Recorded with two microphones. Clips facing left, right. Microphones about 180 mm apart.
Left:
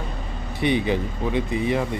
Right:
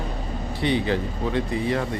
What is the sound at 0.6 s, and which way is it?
Speech, 15° left (ahead or behind).